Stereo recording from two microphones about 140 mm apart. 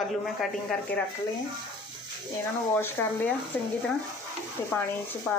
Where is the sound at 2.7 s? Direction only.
15° left (ahead or behind).